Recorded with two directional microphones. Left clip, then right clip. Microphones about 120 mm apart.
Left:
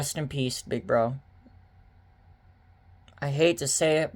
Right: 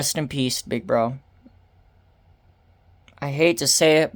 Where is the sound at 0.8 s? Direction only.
45° right (ahead or behind).